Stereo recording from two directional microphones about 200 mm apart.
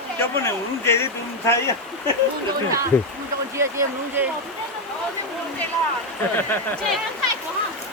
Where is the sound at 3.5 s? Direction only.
15° right (ahead or behind).